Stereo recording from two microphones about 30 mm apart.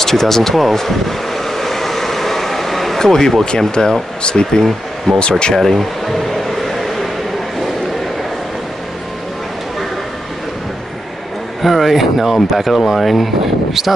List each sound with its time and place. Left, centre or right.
0.0 s speech: centre
0.7 s vehicle: centre
3.0 s speech: centre
5.1 s speech: centre
11.6 s speech: centre
13.8 s a sound: centre